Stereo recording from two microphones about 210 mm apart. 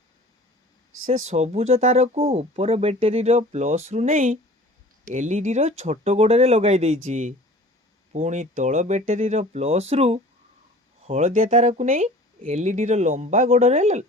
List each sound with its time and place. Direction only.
1.2 s speech: 35° right (ahead or behind)